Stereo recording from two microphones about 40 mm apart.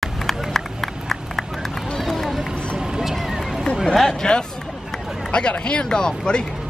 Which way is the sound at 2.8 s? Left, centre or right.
Centre.